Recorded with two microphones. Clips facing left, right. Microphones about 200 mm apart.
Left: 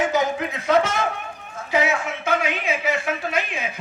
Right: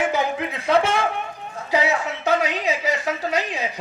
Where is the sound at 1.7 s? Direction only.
35° right (ahead or behind).